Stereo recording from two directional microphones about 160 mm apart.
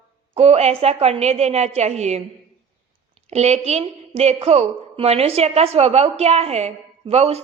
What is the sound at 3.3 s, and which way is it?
A woman's voice, 40° right (ahead or behind).